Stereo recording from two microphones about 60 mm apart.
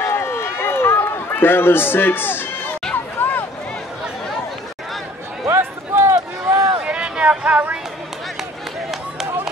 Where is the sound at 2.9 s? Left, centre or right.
Left.